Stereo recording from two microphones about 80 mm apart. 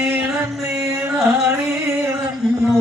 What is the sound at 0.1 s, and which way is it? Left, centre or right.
Music, right.